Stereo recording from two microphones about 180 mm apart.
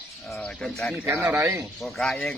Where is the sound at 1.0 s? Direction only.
15° right (ahead or behind).